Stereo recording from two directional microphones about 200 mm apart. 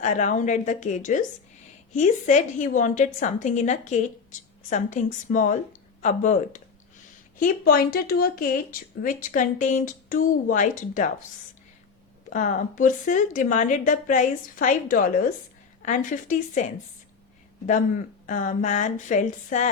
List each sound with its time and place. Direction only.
0.0 s a woman's voice: 40° left (ahead or behind)
12.3 s a woman's voice: 40° left (ahead or behind)
17.7 s a woman's voice: 40° left (ahead or behind)